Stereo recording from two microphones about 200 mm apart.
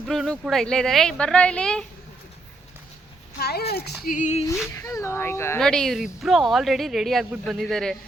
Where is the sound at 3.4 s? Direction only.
55° left (ahead or behind).